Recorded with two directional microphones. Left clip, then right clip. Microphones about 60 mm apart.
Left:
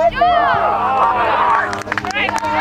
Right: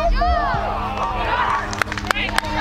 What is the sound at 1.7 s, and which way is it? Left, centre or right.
Run, left.